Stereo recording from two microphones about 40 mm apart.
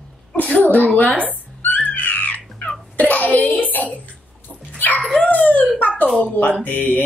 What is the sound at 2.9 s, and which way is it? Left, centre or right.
Wail, left.